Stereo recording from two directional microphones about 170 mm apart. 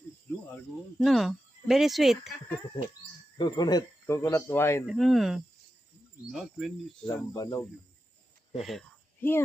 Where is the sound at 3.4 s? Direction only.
25° left (ahead or behind).